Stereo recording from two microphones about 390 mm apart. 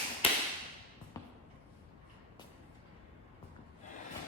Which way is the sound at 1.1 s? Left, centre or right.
Centre.